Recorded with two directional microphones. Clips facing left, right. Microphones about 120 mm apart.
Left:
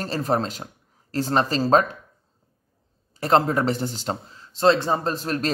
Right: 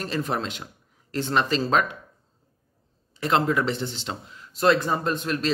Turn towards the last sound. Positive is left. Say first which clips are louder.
# even
turn(degrees=40)  # may be behind; listen again after turning